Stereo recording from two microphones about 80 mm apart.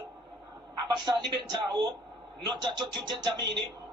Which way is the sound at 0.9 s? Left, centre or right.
Right.